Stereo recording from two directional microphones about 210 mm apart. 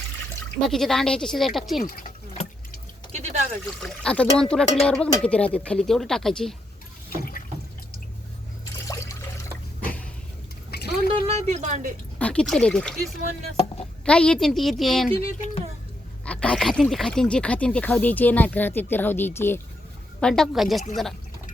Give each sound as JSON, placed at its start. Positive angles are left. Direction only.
{"t": 0.7, "sound": "speech", "side_deg": 0}
{"t": 1.8, "sound": "drip", "side_deg": 40}
{"t": 3.1, "sound": "a sound", "side_deg": -30}
{"t": 3.8, "sound": "speech", "side_deg": 5}
{"t": 7.1, "sound": "water", "side_deg": 45}
{"t": 8.9, "sound": "water", "side_deg": 15}
{"t": 9.8, "sound": "a sound", "side_deg": 5}
{"t": 10.7, "sound": "a sound", "side_deg": 50}
{"t": 11.3, "sound": "speech", "side_deg": -30}
{"t": 12.2, "sound": "speech", "side_deg": 5}
{"t": 13.6, "sound": "a sound", "side_deg": 30}
{"t": 14.0, "sound": "speech", "side_deg": 5}
{"t": 16.2, "sound": "speech", "side_deg": 5}